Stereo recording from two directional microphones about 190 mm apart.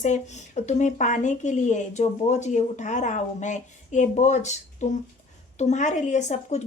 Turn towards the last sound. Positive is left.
turn(degrees=40)  # may be behind; listen again after turning